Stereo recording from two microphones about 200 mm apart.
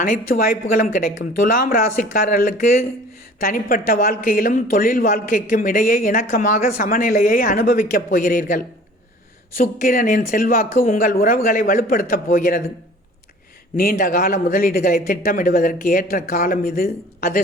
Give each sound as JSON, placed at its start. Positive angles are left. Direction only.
{"t": 0.0, "sound": "a woman's voice", "side_deg": 45}
{"t": 13.7, "sound": "speech", "side_deg": 45}